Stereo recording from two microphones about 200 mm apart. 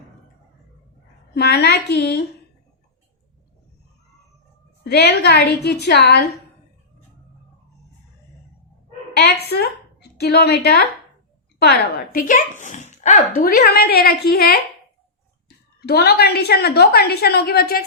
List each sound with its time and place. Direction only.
1.3 s a woman's voice: 55° left (ahead or behind)
4.8 s speech: 55° left (ahead or behind)
9.1 s a woman's voice: 55° left (ahead or behind)